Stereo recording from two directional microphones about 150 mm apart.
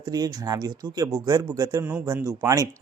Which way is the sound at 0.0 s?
25° right (ahead or behind).